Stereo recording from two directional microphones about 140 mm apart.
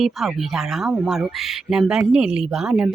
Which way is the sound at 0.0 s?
Centre (ahead or behind).